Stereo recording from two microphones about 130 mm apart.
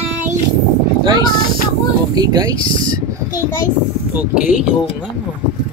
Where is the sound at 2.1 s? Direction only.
30° right (ahead or behind).